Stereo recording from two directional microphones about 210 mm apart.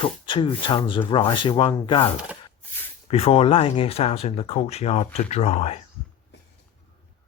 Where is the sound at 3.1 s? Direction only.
30° left (ahead or behind).